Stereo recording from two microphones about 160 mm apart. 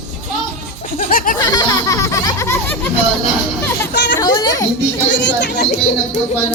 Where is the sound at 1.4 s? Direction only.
25° left (ahead or behind).